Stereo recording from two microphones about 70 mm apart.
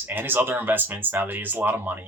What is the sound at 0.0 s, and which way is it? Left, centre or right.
Speech, right.